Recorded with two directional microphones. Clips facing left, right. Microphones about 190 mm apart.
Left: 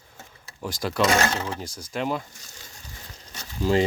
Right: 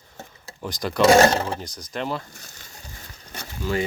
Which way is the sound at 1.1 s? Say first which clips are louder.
Right 12 dB; 35° right (ahead or behind).